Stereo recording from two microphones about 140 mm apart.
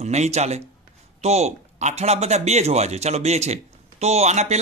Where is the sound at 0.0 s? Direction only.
50° right (ahead or behind).